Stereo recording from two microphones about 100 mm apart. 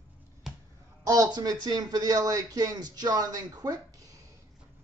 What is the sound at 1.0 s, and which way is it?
A man's voice, 35° right (ahead or behind).